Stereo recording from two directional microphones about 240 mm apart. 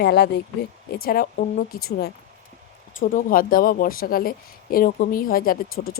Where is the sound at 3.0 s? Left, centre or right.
Left.